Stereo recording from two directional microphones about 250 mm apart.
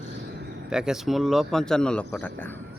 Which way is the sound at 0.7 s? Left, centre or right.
Centre.